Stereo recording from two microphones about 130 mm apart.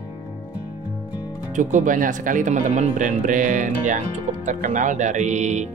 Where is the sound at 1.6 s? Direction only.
75° right (ahead or behind).